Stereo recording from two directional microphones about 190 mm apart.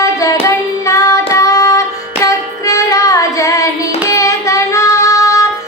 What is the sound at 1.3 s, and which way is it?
Music, 15° left (ahead or behind).